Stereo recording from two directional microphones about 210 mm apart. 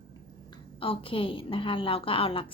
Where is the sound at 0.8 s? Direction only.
25° left (ahead or behind).